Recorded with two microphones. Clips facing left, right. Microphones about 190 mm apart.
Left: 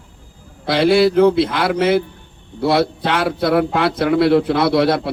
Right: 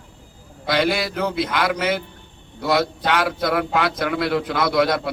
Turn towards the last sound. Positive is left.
turn(degrees=30)  # may be behind; listen again after turning